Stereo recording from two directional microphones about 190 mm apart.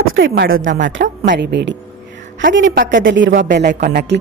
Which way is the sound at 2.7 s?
70° right (ahead or behind).